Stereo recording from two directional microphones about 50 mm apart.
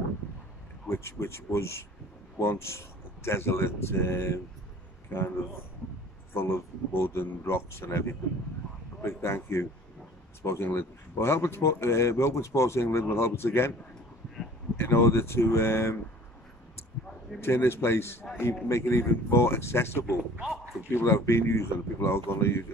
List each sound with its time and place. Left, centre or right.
0.8 s speech: left
14.8 s speech: left
17.4 s speech: left